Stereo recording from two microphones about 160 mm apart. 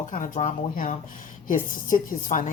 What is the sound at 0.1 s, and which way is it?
Speech, 50° left (ahead or behind).